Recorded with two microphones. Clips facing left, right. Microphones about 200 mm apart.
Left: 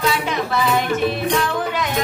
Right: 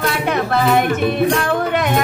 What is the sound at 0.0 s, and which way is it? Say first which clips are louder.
Music: right 2 dB; 55° right (ahead or behind).